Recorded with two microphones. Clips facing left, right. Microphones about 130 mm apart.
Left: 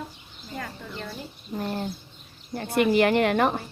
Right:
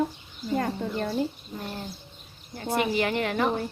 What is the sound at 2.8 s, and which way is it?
Speech, 60° left (ahead or behind).